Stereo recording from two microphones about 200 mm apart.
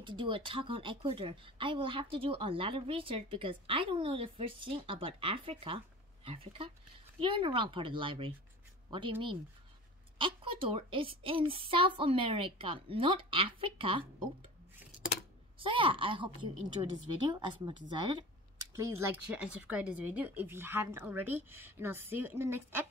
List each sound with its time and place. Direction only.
0.0 s speech: 25° right (ahead or behind)
10.1 s speech: 25° right (ahead or behind)
15.6 s speech: 25° right (ahead or behind)